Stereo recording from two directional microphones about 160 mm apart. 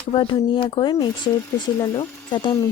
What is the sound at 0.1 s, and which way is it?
Speech, 35° left (ahead or behind).